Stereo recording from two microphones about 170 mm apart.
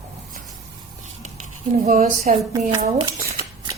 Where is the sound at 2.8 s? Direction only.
40° right (ahead or behind).